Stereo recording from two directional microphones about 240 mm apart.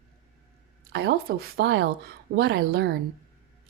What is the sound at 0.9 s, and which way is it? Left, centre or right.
A woman's voice, right.